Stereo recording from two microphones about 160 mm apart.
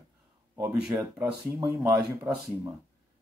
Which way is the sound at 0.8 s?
10° right (ahead or behind).